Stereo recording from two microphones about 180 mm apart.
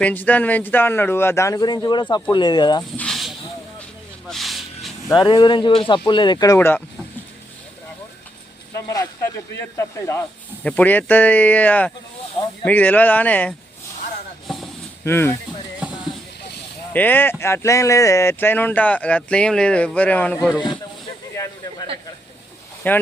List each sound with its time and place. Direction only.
0.0 s speech: 10° left (ahead or behind)
3.0 s a sound: centre (ahead or behind)
4.3 s snake: centre (ahead or behind)
5.0 s speech: 20° left (ahead or behind)
8.7 s speech: 15° left (ahead or behind)
14.4 s a sound: centre (ahead or behind)
15.0 s speech: 15° left (ahead or behind)
15.8 s a sound: 5° right (ahead or behind)
16.9 s speech: 10° left (ahead or behind)
22.8 s speech: 10° left (ahead or behind)